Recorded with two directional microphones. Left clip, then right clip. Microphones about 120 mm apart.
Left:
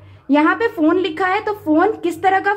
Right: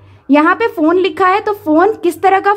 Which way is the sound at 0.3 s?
35° right (ahead or behind).